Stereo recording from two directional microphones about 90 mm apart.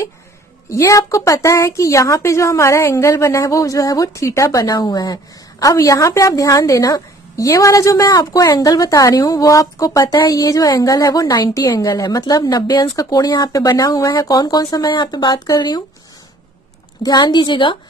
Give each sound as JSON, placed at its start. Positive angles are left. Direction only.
{"t": 0.7, "sound": "a woman's voice", "side_deg": 35}
{"t": 17.0, "sound": "a woman's voice", "side_deg": 50}